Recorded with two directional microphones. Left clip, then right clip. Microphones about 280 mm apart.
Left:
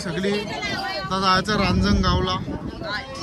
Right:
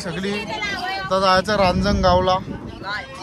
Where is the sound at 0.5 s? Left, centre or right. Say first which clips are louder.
Right 2 dB; left.